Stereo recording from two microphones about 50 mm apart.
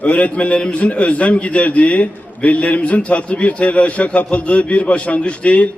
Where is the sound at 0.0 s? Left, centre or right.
Left.